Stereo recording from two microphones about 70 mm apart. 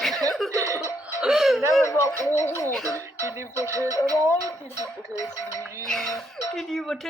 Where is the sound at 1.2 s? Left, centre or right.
Centre.